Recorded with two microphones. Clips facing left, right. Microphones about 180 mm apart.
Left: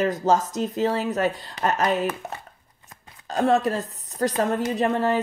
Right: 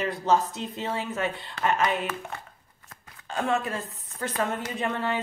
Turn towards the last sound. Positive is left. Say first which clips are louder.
# left 7 dB
turn(degrees=40)  # may be behind; listen again after turning